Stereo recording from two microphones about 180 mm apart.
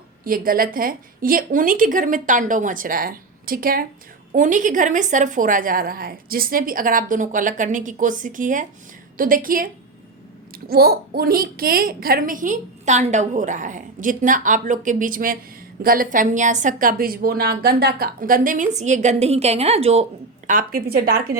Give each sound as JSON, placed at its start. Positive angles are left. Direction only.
{"t": 0.3, "sound": "a child's voice", "side_deg": -55}
{"t": 10.7, "sound": "a child's voice", "side_deg": -55}
{"t": 20.5, "sound": "a woman's voice", "side_deg": -50}